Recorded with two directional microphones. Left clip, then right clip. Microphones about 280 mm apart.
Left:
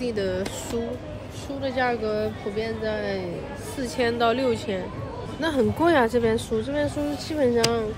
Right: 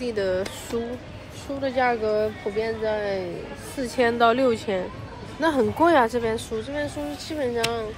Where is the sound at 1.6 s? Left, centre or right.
Centre.